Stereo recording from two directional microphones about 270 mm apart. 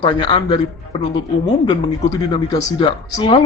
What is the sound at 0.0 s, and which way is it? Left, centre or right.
Speech, centre.